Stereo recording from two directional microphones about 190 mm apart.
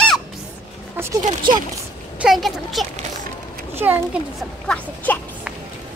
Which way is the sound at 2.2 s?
Centre (ahead or behind).